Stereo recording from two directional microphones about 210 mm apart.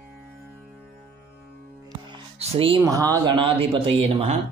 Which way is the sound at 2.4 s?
25° right (ahead or behind).